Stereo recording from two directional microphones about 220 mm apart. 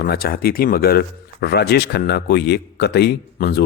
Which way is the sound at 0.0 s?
45° left (ahead or behind).